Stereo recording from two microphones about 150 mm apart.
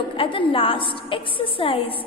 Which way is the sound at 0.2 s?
35° left (ahead or behind).